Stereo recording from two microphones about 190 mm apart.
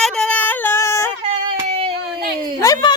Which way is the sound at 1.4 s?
30° right (ahead or behind).